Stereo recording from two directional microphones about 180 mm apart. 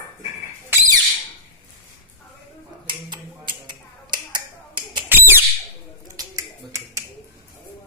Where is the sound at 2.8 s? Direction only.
25° right (ahead or behind).